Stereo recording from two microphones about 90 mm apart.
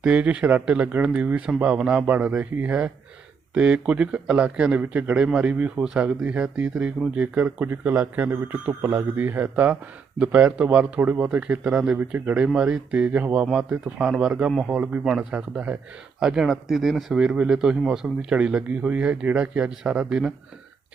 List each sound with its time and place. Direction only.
0.0 s a man's voice: 15° right (ahead or behind)